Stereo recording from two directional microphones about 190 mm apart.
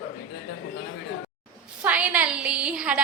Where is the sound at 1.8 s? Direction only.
5° right (ahead or behind).